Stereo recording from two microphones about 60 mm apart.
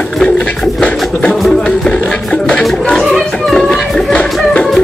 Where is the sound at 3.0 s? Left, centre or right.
Centre.